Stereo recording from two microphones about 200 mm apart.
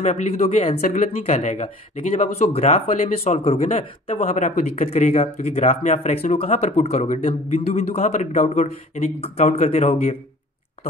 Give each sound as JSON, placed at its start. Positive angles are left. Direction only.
{"t": 0.0, "sound": "speech", "side_deg": 35}